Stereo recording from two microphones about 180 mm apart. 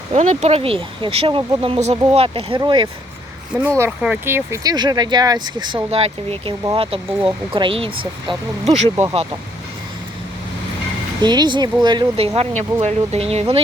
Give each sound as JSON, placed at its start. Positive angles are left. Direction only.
{"t": 0.1, "sound": "speech", "side_deg": -35}
{"t": 3.8, "sound": "speech", "side_deg": -10}
{"t": 11.2, "sound": "speech", "side_deg": -25}